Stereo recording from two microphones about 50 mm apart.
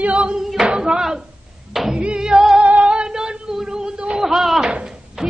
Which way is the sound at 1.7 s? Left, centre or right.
Centre.